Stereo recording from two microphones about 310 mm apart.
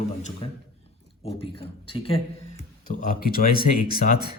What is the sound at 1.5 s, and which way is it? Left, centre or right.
A man's voice, centre.